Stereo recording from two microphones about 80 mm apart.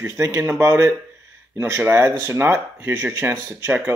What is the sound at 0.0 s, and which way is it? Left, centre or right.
Speech, right.